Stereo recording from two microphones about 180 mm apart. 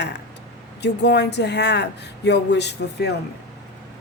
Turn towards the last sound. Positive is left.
turn(degrees=70)  # may be behind; listen again after turning